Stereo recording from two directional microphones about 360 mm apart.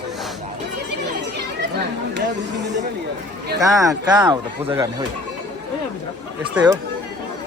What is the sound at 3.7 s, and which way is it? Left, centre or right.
Speech, centre.